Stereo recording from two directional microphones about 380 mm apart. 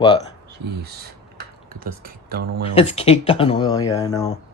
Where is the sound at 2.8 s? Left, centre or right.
Centre.